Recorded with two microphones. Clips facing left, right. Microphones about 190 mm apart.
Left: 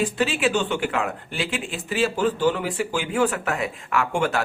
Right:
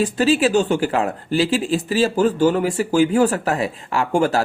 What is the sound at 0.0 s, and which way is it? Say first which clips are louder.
Speech: right 6 dB; 40° right (ahead or behind).